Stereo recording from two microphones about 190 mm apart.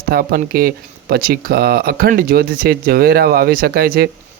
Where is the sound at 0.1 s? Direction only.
50° right (ahead or behind).